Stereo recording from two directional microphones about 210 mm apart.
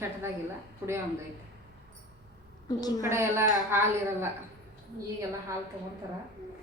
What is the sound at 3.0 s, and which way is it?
A woman's voice, 10° right (ahead or behind).